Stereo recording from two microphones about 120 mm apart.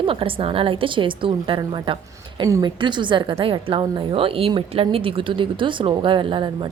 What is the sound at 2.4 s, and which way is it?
Speech, 30° right (ahead or behind).